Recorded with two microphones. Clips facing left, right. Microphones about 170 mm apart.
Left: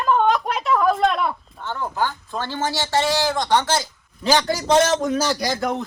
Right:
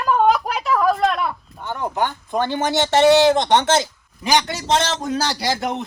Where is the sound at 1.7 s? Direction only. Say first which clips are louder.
Right 2 dB; 20° right (ahead or behind).